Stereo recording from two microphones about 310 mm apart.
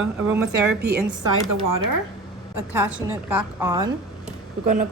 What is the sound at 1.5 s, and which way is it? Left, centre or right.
Speech, right.